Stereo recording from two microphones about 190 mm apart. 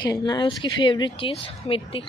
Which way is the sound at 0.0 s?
20° left (ahead or behind).